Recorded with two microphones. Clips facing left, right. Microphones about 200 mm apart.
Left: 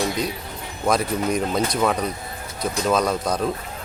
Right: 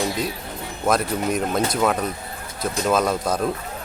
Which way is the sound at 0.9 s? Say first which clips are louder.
Even; centre (ahead or behind).